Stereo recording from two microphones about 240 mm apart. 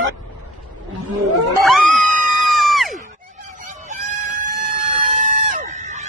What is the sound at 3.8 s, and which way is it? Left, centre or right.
Chicken, right.